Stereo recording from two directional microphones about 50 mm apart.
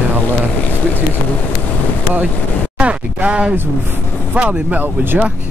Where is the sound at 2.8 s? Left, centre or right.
Right.